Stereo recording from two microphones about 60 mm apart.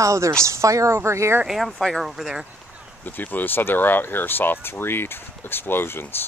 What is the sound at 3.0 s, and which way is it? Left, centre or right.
Speech, left.